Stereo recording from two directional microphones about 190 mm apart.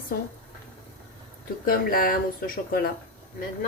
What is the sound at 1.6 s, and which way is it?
A woman's voice, 50° left (ahead or behind).